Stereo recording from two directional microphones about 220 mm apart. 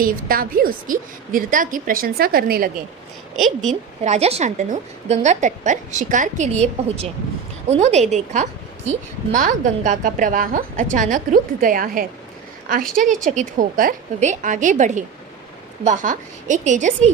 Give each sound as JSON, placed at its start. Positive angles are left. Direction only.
{"t": 0.0, "sound": "a woman's voice", "side_deg": -40}
{"t": 3.3, "sound": "a woman's voice", "side_deg": 0}
{"t": 3.7, "sound": "a woman's voice", "side_deg": -30}
{"t": 13.2, "sound": "a woman's voice", "side_deg": -35}